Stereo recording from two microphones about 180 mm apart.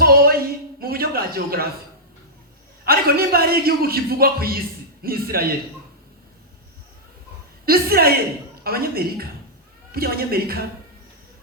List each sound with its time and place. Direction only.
0.0 s a sound: 55° right (ahead or behind)
2.8 s a man's voice: 55° right (ahead or behind)
7.6 s a woman's voice: 55° right (ahead or behind)